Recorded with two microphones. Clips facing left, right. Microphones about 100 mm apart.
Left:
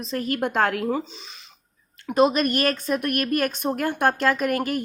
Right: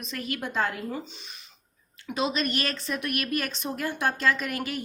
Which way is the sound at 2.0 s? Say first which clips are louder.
Left 9 dB; 50° left (ahead or behind).